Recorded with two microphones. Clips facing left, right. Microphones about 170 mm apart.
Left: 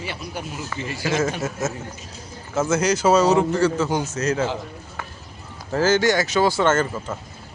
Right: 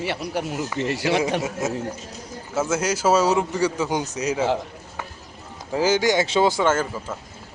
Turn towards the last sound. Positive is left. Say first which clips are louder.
# left 2 dB
turn(degrees=-10)  # may be behind; listen again after turning